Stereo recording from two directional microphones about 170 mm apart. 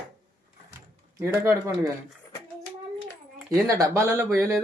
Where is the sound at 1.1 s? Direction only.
15° right (ahead or behind).